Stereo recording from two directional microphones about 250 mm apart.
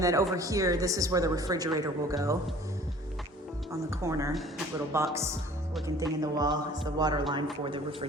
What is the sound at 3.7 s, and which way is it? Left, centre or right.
A woman's voice, centre.